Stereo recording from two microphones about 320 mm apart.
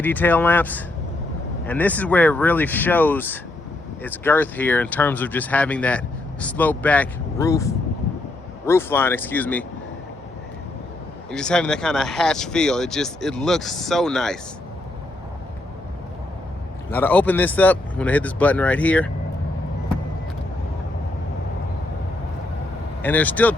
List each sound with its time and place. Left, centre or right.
0.0 s speech: centre
11.3 s speech: centre
16.9 s speech: centre
23.0 s speech: centre